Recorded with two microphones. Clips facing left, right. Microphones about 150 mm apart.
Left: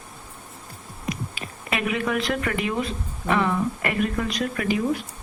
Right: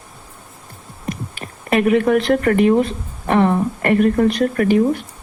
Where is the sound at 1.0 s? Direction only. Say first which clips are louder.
Right 3 dB; 55° right (ahead or behind).